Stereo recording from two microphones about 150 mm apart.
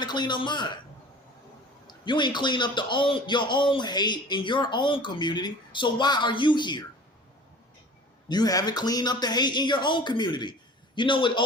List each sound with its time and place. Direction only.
0.0 s a man's voice: 30° left (ahead or behind)
1.9 s a man's voice: 30° left (ahead or behind)
8.3 s a man's voice: 25° left (ahead or behind)